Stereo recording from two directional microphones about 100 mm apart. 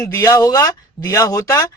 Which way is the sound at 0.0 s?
35° left (ahead or behind).